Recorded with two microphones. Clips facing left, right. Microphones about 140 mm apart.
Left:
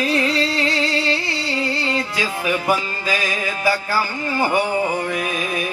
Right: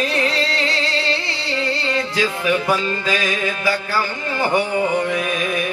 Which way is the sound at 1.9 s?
25° left (ahead or behind).